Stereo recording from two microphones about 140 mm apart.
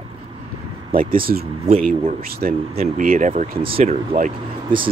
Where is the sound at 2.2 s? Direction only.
90° right.